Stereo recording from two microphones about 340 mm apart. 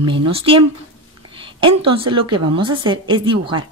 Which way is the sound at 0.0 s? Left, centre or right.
Centre.